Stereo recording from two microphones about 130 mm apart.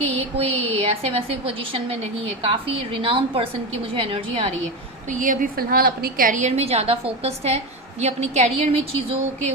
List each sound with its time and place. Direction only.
0.0 s a woman's voice: 45° right (ahead or behind)
5.0 s a woman's voice: 90° right; by 9.5 s 50° right (ahead or behind)